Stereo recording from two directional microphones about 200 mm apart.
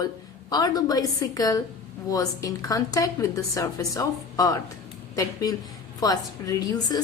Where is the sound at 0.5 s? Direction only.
20° left (ahead or behind).